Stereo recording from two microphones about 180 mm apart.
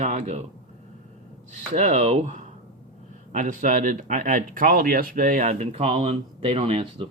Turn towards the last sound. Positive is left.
turn(degrees=-30)  # may be behind; listen again after turning